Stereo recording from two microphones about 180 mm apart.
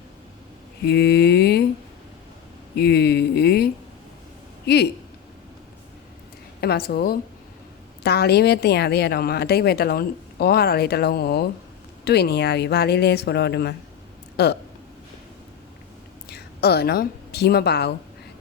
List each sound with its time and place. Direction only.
0.9 s speech: 65° left (ahead or behind)
2.7 s speech: 65° left (ahead or behind)
6.6 s speech: 60° left (ahead or behind)
16.3 s a woman's voice: 60° left (ahead or behind)